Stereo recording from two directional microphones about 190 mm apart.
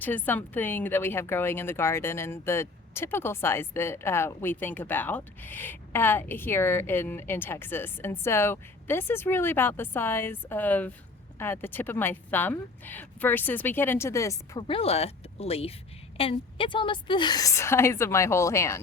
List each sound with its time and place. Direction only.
0.0 s a woman's voice: 10° left (ahead or behind)
14.7 s a woman's voice: 30° left (ahead or behind); by 18.8 s 15° left (ahead or behind)